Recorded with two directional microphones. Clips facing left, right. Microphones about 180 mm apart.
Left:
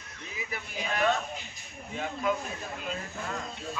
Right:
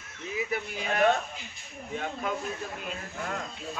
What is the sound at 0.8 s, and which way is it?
Speech, 50° right (ahead or behind).